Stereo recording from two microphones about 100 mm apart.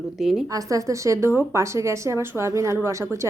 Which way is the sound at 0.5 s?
35° right (ahead or behind).